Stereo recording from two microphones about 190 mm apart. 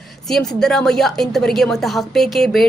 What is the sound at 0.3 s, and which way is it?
Speech, centre (ahead or behind).